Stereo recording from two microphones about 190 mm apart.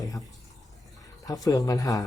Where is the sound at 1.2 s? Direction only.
20° left (ahead or behind).